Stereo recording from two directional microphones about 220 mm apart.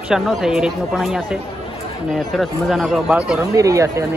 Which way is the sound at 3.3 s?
15° right (ahead or behind).